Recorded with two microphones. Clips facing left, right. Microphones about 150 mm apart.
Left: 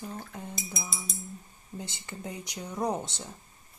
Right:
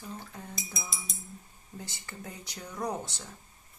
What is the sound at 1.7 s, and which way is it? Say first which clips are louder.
Speech: left 3 dB; 20° left (ahead or behind).